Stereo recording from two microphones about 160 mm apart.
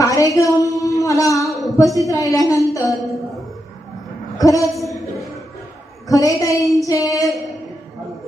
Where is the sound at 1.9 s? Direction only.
20° left (ahead or behind).